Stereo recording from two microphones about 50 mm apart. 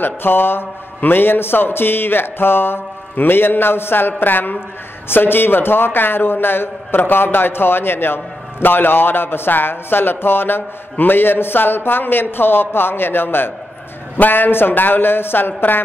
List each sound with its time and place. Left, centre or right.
0.0 s a man's voice: left